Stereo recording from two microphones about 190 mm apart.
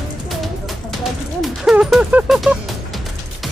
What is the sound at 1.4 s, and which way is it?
Music, 5° right (ahead or behind).